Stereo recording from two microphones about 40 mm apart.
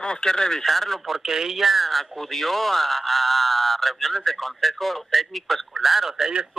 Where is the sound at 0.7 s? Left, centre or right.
Centre.